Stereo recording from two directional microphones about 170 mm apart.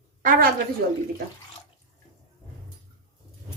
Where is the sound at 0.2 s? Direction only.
50° right (ahead or behind).